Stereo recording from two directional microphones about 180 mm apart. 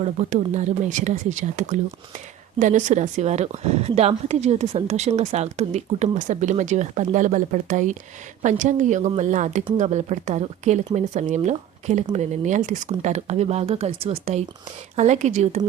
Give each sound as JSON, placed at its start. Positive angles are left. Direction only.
{"t": 0.0, "sound": "speech", "side_deg": -40}